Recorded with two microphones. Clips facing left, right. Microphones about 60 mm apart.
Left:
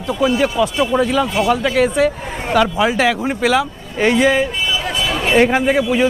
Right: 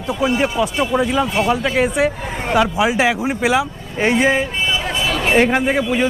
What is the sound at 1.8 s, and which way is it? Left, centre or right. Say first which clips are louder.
Speech: left 2 dB; centre.